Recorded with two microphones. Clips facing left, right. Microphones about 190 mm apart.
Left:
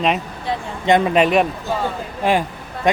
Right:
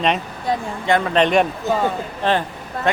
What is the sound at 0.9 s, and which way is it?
Speech, 20° left (ahead or behind).